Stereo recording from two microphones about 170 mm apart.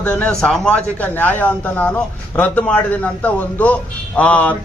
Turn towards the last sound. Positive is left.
turn(degrees=10)  # may be behind; listen again after turning